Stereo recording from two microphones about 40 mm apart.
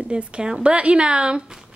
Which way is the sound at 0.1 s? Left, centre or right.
Right.